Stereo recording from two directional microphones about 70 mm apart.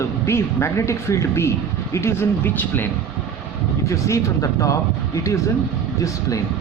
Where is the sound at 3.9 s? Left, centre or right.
Left.